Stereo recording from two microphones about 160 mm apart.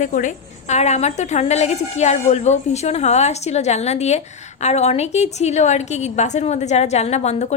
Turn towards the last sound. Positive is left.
turn(degrees=45)  # may be behind; listen again after turning